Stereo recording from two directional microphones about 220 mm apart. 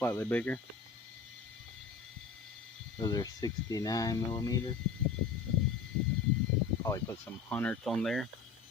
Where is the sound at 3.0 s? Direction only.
15° left (ahead or behind).